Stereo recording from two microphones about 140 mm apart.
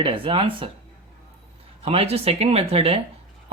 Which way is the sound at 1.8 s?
45° right (ahead or behind).